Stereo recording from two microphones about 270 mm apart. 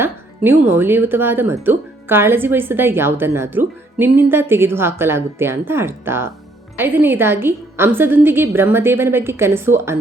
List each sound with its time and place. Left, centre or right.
0.0 s speech: centre